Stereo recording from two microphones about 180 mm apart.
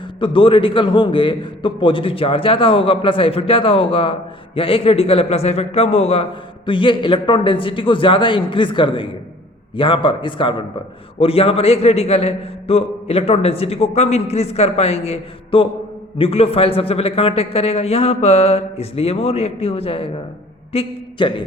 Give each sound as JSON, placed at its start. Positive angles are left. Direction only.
{"t": 0.2, "sound": "a man's voice", "side_deg": 30}